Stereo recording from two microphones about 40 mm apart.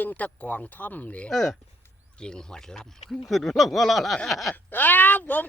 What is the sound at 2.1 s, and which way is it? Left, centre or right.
Speech, left.